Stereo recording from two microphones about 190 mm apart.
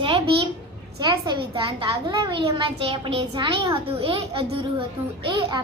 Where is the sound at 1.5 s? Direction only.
25° right (ahead or behind).